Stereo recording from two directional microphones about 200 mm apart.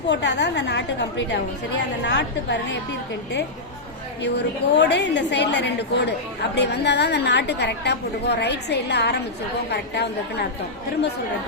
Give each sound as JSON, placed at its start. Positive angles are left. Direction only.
{"t": 0.1, "sound": "a woman's voice", "side_deg": 60}
{"t": 4.2, "sound": "a woman's voice", "side_deg": 60}